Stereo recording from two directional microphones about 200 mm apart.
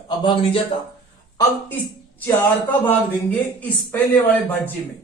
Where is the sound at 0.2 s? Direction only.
25° left (ahead or behind).